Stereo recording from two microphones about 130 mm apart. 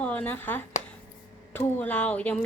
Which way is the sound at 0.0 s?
10° left (ahead or behind).